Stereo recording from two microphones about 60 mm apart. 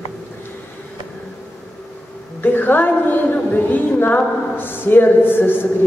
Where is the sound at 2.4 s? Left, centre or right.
Left.